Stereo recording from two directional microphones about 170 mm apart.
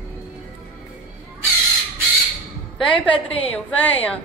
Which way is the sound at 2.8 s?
30° left (ahead or behind).